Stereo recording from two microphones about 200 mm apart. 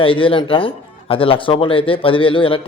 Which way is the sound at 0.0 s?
25° left (ahead or behind).